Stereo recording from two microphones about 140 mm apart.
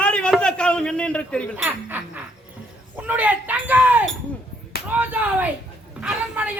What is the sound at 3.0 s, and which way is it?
A woman's voice, 10° right (ahead or behind).